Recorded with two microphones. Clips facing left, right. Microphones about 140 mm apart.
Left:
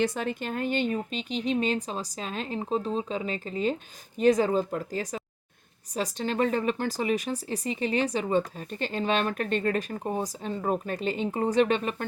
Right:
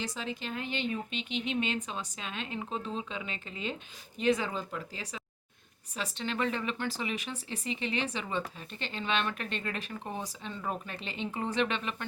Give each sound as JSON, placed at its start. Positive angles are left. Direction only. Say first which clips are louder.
{"t": 0.0, "sound": "speech", "louder": "left 9 dB", "side_deg": 55}